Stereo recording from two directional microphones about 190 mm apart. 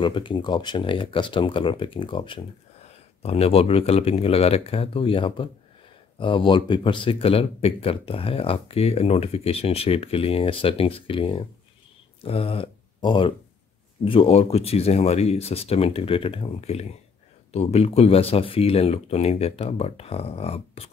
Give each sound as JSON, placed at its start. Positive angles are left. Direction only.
{"t": 0.0, "sound": "speech", "side_deg": 25}